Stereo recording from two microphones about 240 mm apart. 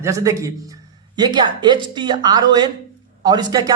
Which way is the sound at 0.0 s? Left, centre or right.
Centre.